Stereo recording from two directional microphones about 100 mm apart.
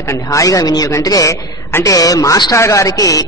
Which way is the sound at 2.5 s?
30° left (ahead or behind).